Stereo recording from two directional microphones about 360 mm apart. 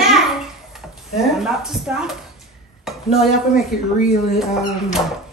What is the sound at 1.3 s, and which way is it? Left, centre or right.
Speech, centre.